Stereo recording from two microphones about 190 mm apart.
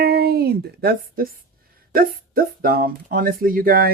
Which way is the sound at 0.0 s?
55° right (ahead or behind).